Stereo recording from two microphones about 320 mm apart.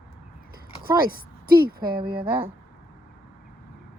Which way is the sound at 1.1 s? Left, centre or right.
Right.